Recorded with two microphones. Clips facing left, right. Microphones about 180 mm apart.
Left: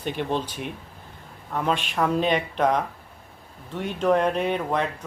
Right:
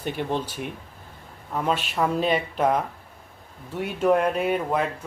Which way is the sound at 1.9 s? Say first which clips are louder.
Left 1 dB; 5° right (ahead or behind).